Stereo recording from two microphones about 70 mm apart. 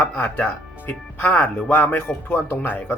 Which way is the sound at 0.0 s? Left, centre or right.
Left.